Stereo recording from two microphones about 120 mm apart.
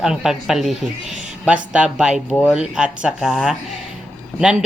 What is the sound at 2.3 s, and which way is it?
Speech, 15° left (ahead or behind).